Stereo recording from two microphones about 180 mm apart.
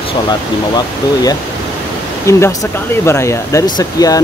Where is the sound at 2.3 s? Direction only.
15° left (ahead or behind).